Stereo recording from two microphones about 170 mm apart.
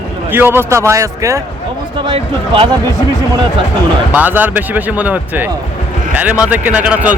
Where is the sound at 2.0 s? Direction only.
30° right (ahead or behind).